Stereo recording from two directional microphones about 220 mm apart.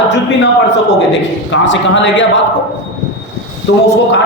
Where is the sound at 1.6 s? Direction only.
55° left (ahead or behind).